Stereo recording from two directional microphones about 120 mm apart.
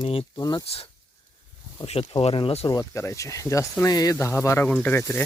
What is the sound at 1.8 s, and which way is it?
Speech, 55° left (ahead or behind).